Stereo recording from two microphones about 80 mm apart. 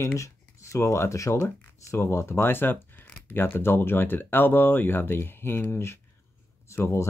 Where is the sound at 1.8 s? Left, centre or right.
Left.